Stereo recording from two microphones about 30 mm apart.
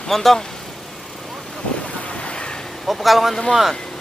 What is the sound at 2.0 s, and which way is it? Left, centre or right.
Waves, left.